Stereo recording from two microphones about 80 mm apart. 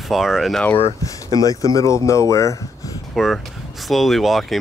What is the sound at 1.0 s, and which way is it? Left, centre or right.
Speech, left.